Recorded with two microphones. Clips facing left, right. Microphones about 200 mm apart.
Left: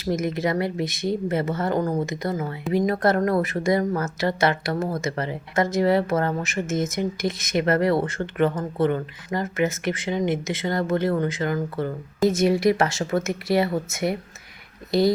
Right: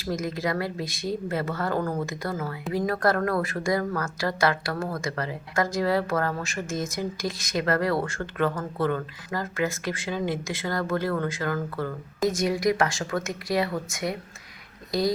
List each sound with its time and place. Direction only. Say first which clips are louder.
0.0 s a woman's voice: left 4 dB; 20° left (ahead or behind)